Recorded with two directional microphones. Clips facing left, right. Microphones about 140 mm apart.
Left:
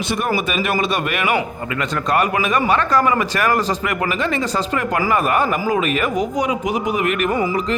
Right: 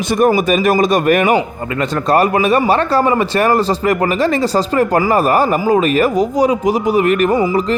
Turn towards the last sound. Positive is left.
turn(degrees=-35)  # may be behind; listen again after turning